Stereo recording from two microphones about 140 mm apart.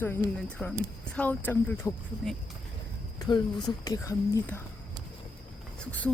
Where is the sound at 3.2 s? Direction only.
30° left (ahead or behind).